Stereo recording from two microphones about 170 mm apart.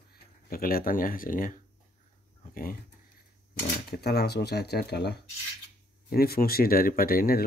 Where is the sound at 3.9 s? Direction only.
70° left (ahead or behind).